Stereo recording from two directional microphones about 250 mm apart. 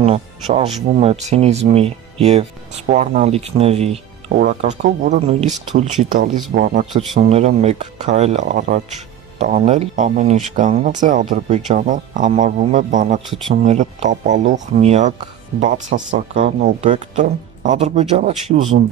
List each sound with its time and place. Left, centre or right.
0.0 s speech: right
16.2 s speech: right